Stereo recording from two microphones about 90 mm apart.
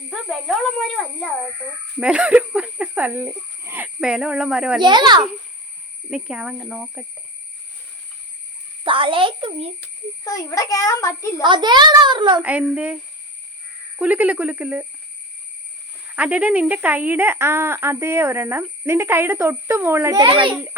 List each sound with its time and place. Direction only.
0.1 s speech: centre (ahead or behind)
2.0 s a sound: 10° right (ahead or behind)
3.8 s speech: 5° right (ahead or behind)
4.8 s a child's voice: 55° right (ahead or behind)
6.1 s speech: 5° right (ahead or behind)
8.8 s a child's voice: 75° right (ahead or behind)
10.2 s a child's voice: 40° left (ahead or behind)
11.4 s a child's voice: 60° right (ahead or behind)
12.4 s speech: 15° right (ahead or behind)
14.0 s speech: 15° right (ahead or behind)
16.1 s speech: 15° right (ahead or behind)
20.2 s a child's voice: 65° right (ahead or behind)